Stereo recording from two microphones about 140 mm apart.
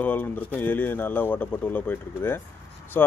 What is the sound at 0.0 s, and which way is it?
Speech, 10° left (ahead or behind).